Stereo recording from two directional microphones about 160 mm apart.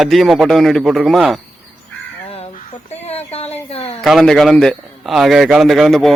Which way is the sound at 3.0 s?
40° left (ahead or behind).